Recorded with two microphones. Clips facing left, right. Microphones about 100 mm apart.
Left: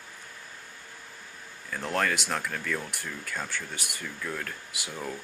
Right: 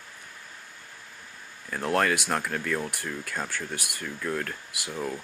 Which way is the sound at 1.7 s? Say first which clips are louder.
Right 4 dB; 5° right (ahead or behind).